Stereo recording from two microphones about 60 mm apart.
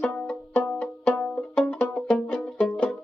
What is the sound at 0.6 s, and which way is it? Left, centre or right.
Music, centre.